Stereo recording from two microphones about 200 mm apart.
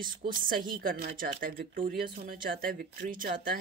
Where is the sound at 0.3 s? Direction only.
45° right (ahead or behind).